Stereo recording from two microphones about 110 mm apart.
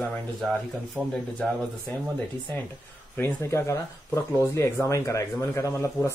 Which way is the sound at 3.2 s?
20° left (ahead or behind).